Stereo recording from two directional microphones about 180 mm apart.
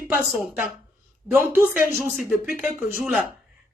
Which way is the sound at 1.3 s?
10° right (ahead or behind).